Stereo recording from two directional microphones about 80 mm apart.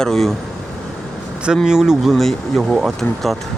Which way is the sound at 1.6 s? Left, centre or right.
Centre.